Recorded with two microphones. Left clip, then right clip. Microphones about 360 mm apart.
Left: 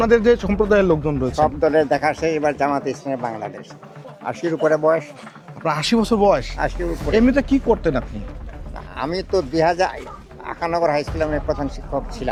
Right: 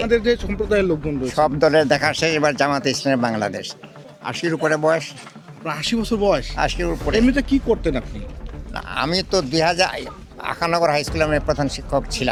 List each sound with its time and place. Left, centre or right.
0.0 s speech: centre
1.5 s speech: right
4.3 s speech: right
4.6 s speech: right
5.6 s speech: centre
6.6 s speech: right
7.1 s speech: centre
8.7 s a man's voice: right